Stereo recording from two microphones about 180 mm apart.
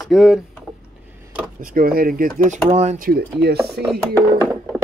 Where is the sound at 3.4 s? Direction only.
65° right (ahead or behind).